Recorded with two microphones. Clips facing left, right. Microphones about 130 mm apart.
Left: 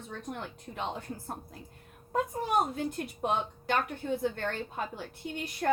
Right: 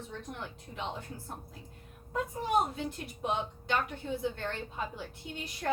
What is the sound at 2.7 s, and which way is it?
A woman's voice, 50° left (ahead or behind).